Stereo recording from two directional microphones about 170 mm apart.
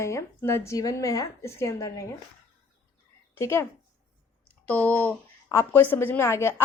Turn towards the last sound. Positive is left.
turn(degrees=15)  # may be behind; listen again after turning